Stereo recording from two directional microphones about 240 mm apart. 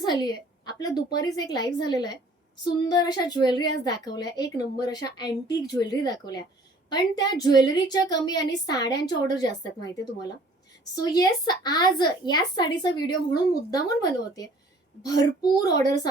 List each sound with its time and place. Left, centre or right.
0.0 s a woman's voice: centre
10.9 s a woman's voice: centre